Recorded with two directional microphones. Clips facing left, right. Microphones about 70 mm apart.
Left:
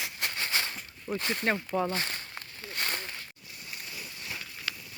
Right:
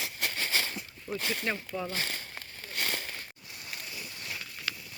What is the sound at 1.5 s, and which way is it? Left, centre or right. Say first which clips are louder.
Speech: left 5 dB; left.